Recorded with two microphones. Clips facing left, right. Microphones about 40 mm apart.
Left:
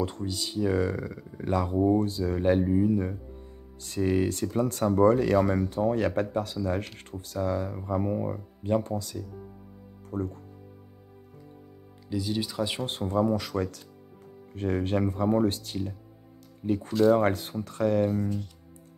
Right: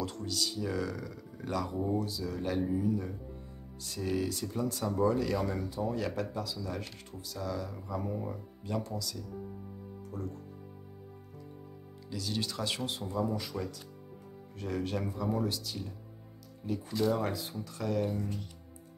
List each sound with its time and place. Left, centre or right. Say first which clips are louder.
0.0 s speech: left 4 dB; left
1.9 s speech: left 9 dB; left
12.1 s speech: left 6 dB; centre
12.8 s speech: left 10 dB; left
14.5 s speech: left 7 dB; left
17.1 s speech: left 9 dB; left